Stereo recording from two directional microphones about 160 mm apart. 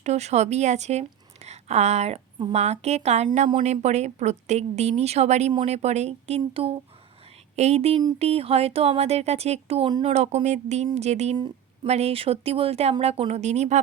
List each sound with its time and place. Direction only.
0.0 s a woman's voice: 45° right (ahead or behind)
11.3 s a sound: 25° right (ahead or behind)
11.9 s speech: 40° right (ahead or behind)